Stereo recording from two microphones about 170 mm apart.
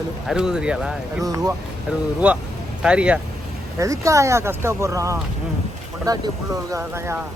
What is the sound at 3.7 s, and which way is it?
Speech, 20° right (ahead or behind).